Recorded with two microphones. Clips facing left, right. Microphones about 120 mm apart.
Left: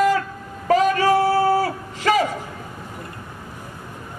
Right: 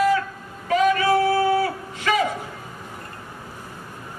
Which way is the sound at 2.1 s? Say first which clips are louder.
Left 4 dB; 35° left (ahead or behind).